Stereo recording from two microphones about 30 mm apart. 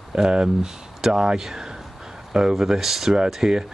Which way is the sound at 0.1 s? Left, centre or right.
Right.